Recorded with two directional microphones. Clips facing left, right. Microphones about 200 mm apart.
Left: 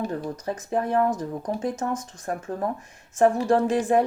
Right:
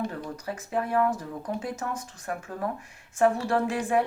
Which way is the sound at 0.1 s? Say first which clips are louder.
Left 5 dB; 40° left (ahead or behind).